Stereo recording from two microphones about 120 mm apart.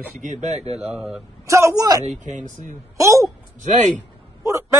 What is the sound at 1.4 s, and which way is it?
Speech, 25° right (ahead or behind).